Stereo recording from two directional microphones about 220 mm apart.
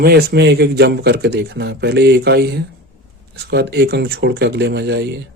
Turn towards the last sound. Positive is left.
turn(degrees=-50)  # may be behind; listen again after turning